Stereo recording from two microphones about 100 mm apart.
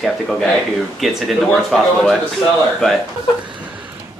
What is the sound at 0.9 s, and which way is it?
Speech, centre (ahead or behind).